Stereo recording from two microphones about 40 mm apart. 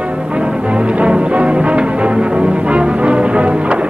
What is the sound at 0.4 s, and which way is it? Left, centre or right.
Music, right.